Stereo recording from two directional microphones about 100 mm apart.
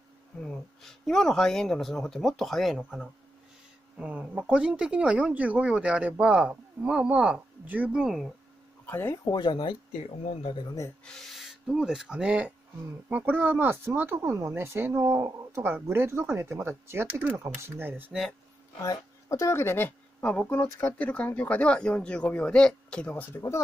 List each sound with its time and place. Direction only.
0.4 s speech: 5° left (ahead or behind)
4.0 s speech: 10° right (ahead or behind)
8.8 s speech: 20° left (ahead or behind)
9.1 s speech: 40° left (ahead or behind)
9.5 s speech: 60° left (ahead or behind)
10.6 s speech: 35° left (ahead or behind)
11.1 s speech: 5° left (ahead or behind); by 18.1 s 20° right (ahead or behind)
18.8 s speech: 35° left (ahead or behind)